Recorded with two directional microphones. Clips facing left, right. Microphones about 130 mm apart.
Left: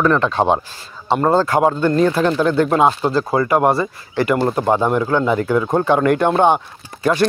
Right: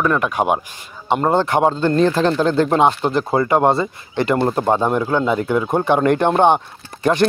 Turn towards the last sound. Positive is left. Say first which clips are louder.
# even
turn(degrees=-20)  # may be behind; listen again after turning